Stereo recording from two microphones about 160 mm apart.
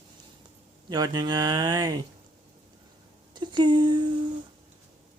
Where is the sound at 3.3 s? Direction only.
30° right (ahead or behind).